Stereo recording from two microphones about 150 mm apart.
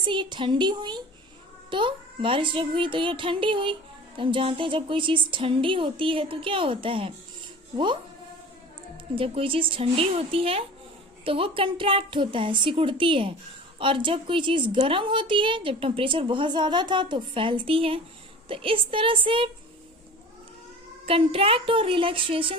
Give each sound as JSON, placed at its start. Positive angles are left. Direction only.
{"t": 0.0, "sound": "a woman's voice", "side_deg": -35}
{"t": 9.1, "sound": "a woman's voice", "side_deg": -40}
{"t": 21.1, "sound": "a woman's voice", "side_deg": -40}